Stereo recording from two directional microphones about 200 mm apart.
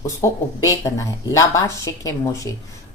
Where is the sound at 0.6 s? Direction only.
15° left (ahead or behind).